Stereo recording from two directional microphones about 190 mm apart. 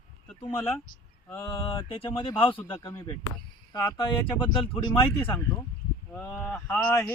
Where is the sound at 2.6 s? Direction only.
15° left (ahead or behind).